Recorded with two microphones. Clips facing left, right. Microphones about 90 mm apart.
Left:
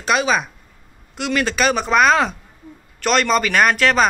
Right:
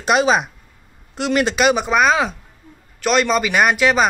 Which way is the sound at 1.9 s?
5° right (ahead or behind).